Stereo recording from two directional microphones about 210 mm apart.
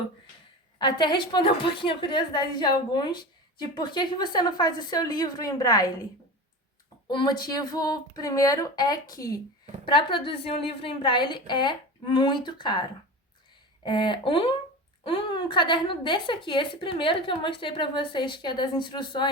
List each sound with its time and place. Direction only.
0.8 s a woman's voice: 20° left (ahead or behind)
7.1 s a woman's voice: 25° left (ahead or behind)
13.8 s a woman's voice: 25° left (ahead or behind)